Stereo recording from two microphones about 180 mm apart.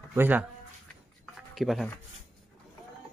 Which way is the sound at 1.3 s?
Centre (ahead or behind).